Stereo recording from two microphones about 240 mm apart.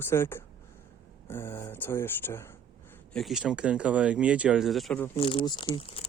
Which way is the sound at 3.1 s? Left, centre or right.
Centre.